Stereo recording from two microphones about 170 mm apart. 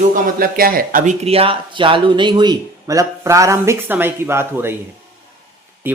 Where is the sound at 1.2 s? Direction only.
35° right (ahead or behind); by 4.7 s 15° right (ahead or behind).